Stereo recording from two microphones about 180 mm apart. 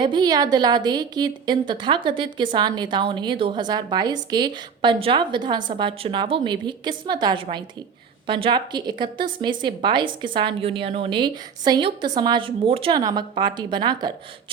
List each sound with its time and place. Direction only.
0.0 s a woman's voice: 25° right (ahead or behind)